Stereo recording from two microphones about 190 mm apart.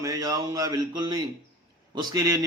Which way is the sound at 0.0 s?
20° right (ahead or behind).